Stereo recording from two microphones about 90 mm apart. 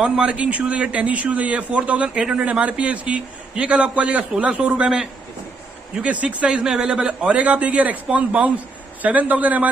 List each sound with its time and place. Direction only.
0.0 s a man's voice: 15° right (ahead or behind)